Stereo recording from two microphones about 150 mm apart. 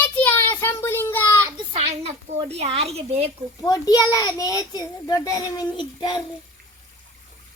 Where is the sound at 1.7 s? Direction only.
40° right (ahead or behind).